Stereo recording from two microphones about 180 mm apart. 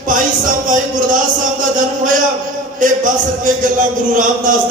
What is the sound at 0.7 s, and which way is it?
Speech, 45° right (ahead or behind).